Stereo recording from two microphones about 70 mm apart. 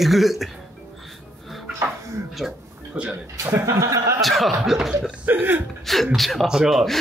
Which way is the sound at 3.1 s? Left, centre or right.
Right.